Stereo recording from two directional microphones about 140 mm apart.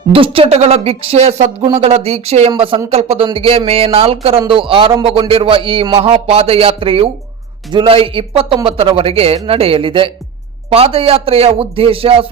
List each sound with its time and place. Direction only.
0.1 s a man's voice: 40° right (ahead or behind)